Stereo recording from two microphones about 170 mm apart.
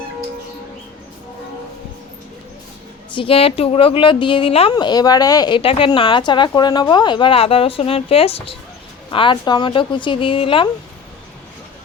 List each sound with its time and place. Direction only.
3.2 s a woman's voice: 35° left (ahead or behind)